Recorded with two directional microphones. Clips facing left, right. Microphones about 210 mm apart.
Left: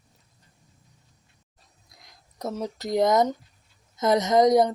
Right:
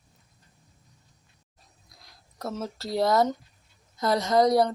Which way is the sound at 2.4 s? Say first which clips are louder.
Left 3 dB; 15° left (ahead or behind).